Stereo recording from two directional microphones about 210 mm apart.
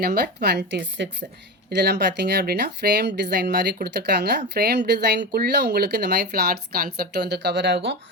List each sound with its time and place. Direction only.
0.0 s speech: 45° right (ahead or behind)